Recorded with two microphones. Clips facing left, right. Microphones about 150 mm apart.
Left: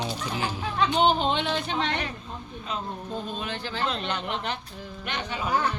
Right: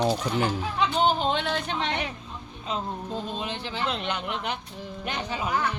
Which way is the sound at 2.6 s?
25° right (ahead or behind).